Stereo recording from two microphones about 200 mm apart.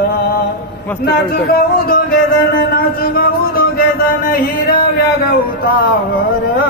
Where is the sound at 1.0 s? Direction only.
50° left (ahead or behind).